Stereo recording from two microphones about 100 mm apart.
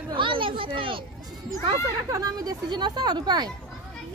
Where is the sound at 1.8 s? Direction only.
35° right (ahead or behind).